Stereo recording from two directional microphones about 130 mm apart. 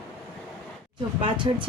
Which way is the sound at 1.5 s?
40° right (ahead or behind).